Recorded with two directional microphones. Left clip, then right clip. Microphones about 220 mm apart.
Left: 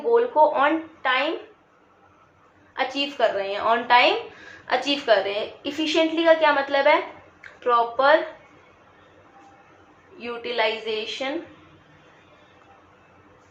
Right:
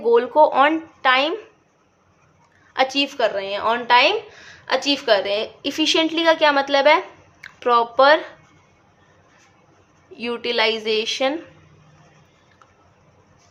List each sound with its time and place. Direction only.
0.1 s speech: 50° right (ahead or behind)
2.7 s speech: 50° right (ahead or behind)
10.2 s speech: 55° right (ahead or behind)